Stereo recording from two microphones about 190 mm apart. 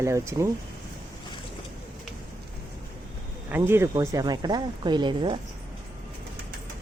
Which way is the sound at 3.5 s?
10° right (ahead or behind).